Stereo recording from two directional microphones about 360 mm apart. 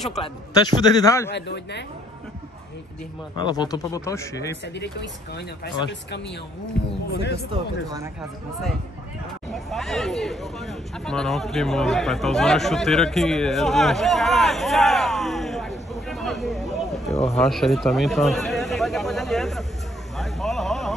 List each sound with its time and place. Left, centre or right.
0.2 s a man's voice: centre
1.3 s speech: left
3.3 s a man's voice: centre
4.7 s speech: left
7.1 s speech: left
7.5 s speech: centre
9.7 s speech: centre
16.8 s a sound: centre